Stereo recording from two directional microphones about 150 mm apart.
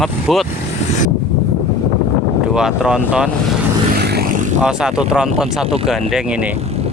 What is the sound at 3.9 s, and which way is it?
Vehicle, 90° right.